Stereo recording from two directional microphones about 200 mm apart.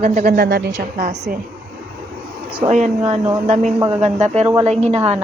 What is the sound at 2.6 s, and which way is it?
A woman's voice, 35° right (ahead or behind).